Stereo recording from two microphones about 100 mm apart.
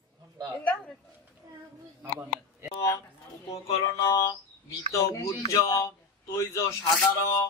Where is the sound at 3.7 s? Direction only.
30° left (ahead or behind).